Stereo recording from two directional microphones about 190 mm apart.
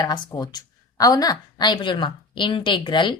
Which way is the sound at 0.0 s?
20° left (ahead or behind).